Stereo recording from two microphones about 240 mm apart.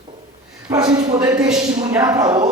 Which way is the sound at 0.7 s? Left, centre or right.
Centre.